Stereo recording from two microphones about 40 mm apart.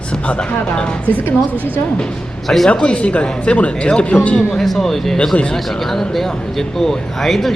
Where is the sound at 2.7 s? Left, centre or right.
Left.